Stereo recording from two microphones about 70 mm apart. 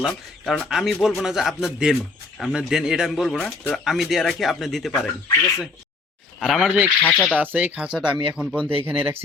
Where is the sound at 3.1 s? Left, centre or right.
Centre.